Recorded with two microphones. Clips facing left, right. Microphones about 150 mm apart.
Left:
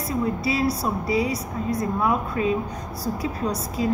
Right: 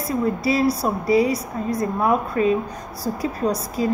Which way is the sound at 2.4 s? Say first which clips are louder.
Right 4 dB; 45° right (ahead or behind).